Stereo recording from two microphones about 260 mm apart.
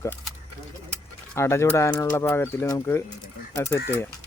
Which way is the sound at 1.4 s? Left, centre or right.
Centre.